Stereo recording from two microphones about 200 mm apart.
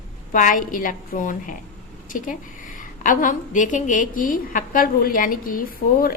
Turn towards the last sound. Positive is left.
turn(degrees=45)  # may be behind; listen again after turning